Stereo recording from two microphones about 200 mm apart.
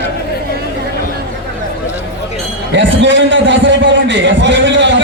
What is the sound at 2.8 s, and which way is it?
A man's voice, 65° right (ahead or behind).